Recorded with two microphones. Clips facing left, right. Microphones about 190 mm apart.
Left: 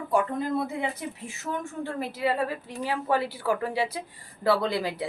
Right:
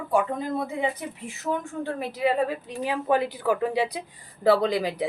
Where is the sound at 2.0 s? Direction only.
15° right (ahead or behind).